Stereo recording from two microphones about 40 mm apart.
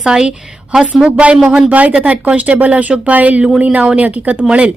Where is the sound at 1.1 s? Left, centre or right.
Right.